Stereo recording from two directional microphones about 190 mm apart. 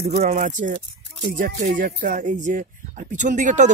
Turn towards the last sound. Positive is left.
turn(degrees=-40)  # may be behind; listen again after turning